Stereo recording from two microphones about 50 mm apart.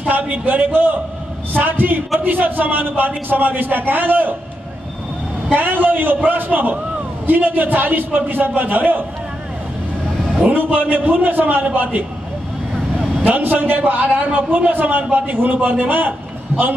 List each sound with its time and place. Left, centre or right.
0.0 s a man's voice: right
5.5 s a man's voice: right
10.5 s a man's voice: right
13.2 s a man's voice: right